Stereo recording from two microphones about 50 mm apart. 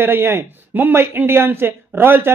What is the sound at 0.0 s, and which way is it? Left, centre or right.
Speech, right.